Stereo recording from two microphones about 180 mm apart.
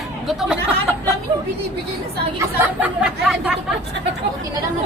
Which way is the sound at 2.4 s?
5° right (ahead or behind).